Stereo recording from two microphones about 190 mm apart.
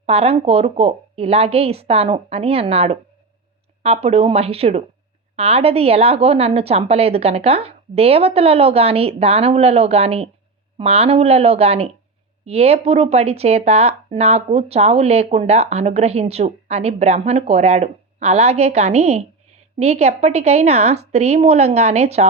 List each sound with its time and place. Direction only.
0.0 s speech: 30° right (ahead or behind)